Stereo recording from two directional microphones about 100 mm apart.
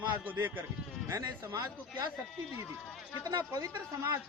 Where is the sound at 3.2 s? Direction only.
35° right (ahead or behind).